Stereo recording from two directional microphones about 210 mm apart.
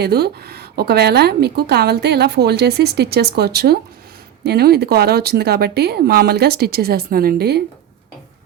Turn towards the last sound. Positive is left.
turn(degrees=-50)  # may be behind; listen again after turning